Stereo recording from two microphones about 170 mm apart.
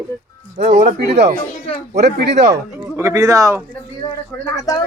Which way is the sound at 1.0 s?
75° right (ahead or behind).